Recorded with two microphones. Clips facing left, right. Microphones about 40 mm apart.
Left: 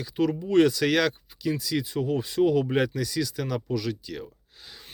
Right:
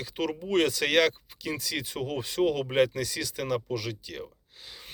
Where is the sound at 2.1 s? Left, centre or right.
Right.